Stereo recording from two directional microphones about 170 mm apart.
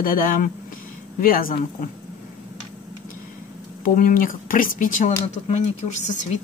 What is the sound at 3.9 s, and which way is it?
Speech, 55° left (ahead or behind).